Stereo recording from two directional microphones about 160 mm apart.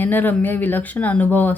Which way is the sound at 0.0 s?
10° left (ahead or behind).